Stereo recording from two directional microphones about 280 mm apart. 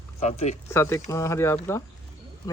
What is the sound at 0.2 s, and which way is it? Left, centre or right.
Speech, left.